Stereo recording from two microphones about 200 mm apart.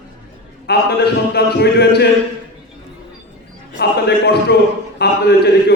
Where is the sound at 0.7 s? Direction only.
55° left (ahead or behind).